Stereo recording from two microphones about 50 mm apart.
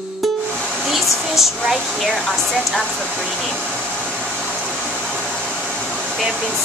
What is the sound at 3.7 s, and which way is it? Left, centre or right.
Hair dryer, centre.